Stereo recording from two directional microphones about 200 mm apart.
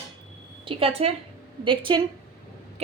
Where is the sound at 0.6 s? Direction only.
30° right (ahead or behind).